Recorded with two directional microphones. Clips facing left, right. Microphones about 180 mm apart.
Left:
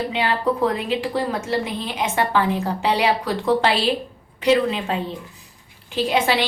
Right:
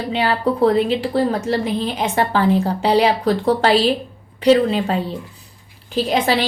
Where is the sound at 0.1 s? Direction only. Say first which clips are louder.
Right 3 dB; 35° right (ahead or behind).